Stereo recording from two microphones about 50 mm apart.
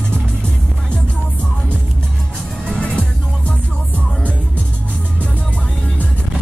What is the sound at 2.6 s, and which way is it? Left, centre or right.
Music, centre.